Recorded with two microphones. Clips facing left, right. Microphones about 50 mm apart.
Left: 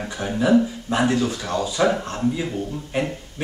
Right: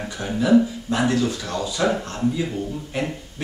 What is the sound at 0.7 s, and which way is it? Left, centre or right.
A man's voice, centre.